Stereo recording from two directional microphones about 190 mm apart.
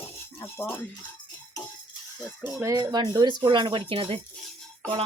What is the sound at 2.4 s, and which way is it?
Speech, 10° right (ahead or behind).